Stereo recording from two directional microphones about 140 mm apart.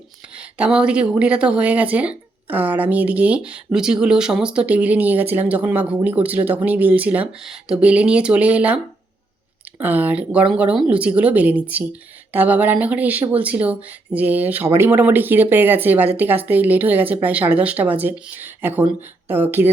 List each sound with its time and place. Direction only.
0.3 s speech: 10° right (ahead or behind)